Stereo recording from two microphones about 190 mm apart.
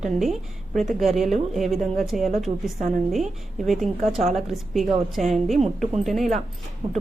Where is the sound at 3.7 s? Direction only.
Centre (ahead or behind).